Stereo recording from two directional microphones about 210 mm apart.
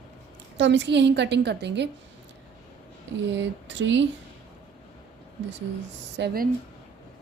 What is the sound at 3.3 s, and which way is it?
Speech, 60° right (ahead or behind).